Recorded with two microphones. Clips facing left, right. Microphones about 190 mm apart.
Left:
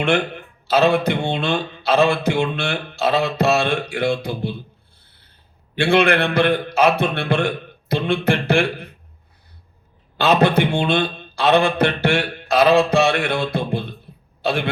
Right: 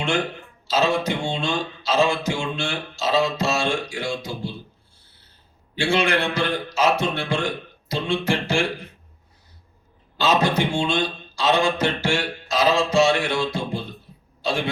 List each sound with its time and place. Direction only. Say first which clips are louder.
0.7 s speech: left 5 dB; 60° left (ahead or behind)
5.7 s speech: left 5 dB; 60° left (ahead or behind)
10.2 s a man's voice: left 4 dB; 60° left (ahead or behind)